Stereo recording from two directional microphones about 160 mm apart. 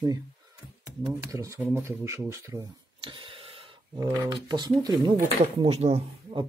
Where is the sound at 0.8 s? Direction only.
20° right (ahead or behind).